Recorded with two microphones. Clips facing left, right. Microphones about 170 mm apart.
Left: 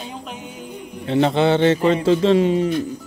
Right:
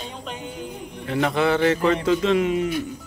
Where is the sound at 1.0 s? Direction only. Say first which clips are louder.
Left 4 dB; 25° left (ahead or behind).